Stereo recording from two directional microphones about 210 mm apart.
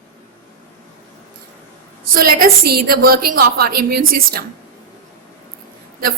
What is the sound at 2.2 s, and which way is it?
A woman's voice, 45° right (ahead or behind).